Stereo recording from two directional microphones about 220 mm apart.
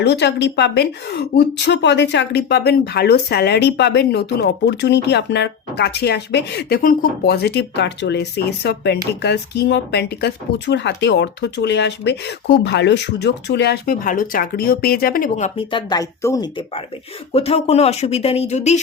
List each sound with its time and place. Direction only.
0.0 s speech: 50° left (ahead or behind); by 18.8 s 30° left (ahead or behind)